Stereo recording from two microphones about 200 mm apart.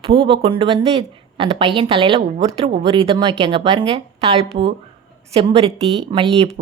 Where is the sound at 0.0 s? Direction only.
25° right (ahead or behind).